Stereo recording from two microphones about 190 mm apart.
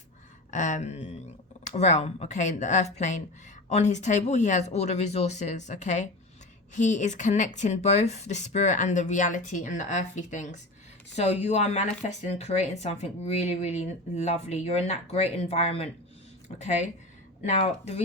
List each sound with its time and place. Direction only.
0.5 s speech: 40° left (ahead or behind)